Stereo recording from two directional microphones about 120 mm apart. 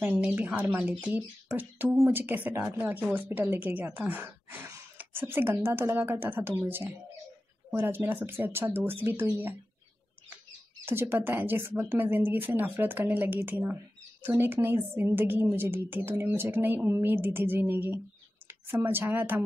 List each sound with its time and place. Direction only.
0.2 s speech: 10° right (ahead or behind)
10.9 s a woman's voice: 20° right (ahead or behind)